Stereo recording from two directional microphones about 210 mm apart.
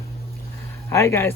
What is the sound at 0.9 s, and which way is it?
Speech, 10° left (ahead or behind).